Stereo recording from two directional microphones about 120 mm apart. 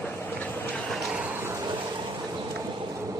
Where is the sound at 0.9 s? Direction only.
Centre (ahead or behind).